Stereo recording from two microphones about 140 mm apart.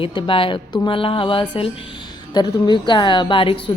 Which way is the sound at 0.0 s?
40° left (ahead or behind).